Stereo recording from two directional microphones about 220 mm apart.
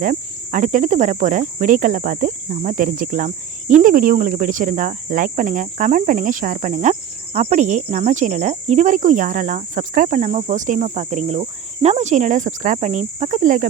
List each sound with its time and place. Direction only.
0.0 s cricket: 35° right (ahead or behind)